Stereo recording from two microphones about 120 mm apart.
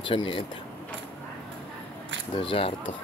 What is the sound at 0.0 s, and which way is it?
Speech, 45° left (ahead or behind).